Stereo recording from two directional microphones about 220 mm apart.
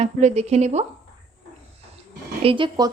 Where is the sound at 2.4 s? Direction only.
25° right (ahead or behind).